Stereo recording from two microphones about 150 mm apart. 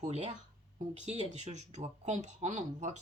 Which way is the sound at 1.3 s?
50° right (ahead or behind).